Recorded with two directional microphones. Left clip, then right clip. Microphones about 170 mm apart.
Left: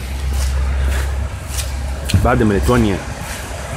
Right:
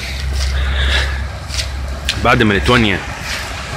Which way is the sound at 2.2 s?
15° right (ahead or behind).